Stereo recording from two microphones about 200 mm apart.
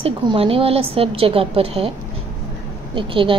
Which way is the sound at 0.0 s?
30° right (ahead or behind).